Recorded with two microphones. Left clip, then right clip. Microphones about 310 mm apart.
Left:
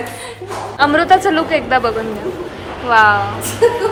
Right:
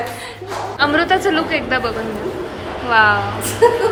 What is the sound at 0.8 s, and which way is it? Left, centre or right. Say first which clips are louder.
A woman's voice: left 4 dB; centre.